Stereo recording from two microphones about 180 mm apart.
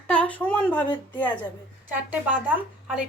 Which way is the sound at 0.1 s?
5° left (ahead or behind).